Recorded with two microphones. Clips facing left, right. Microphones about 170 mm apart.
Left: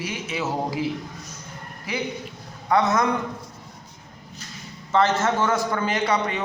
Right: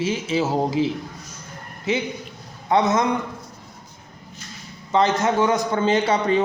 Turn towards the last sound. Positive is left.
turn(degrees=-30)  # may be behind; listen again after turning